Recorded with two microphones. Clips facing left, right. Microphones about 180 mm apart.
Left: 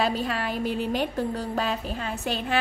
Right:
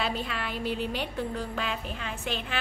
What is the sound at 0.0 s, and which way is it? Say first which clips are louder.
A woman's voice: left 6 dB; 40° left (ahead or behind).